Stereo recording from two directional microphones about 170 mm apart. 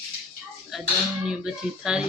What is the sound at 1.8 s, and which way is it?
Speech, 5° right (ahead or behind).